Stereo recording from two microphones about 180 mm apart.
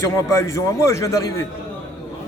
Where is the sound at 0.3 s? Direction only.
15° left (ahead or behind).